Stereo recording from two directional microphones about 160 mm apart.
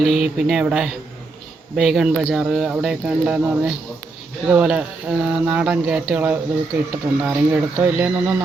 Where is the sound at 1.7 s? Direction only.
5° right (ahead or behind).